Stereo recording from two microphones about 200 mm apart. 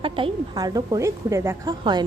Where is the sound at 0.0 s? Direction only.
20° right (ahead or behind).